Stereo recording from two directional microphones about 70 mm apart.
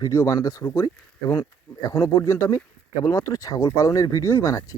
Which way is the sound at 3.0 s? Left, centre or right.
Left.